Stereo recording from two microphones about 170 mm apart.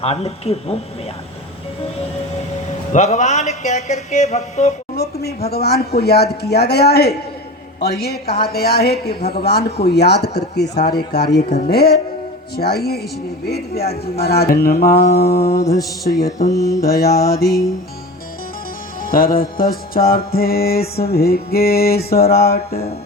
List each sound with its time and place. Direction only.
0.0 s speech: 35° left (ahead or behind)
2.9 s a sound: 45° left (ahead or behind)
5.5 s speech: 70° left (ahead or behind)
11.7 s music: 65° left (ahead or behind)
12.5 s speech: 65° left (ahead or behind)
13.8 s speech: 35° left (ahead or behind)
14.2 s music: 70° left (ahead or behind)
15.6 s mantra: 20° left (ahead or behind)
19.0 s music: 55° left (ahead or behind)
22.3 s speech: 65° left (ahead or behind)